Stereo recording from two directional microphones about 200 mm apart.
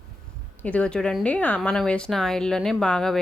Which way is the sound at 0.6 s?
5° left (ahead or behind).